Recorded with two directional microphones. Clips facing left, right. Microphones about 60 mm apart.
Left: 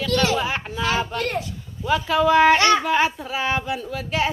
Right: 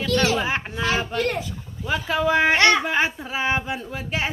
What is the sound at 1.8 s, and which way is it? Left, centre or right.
Speech, right.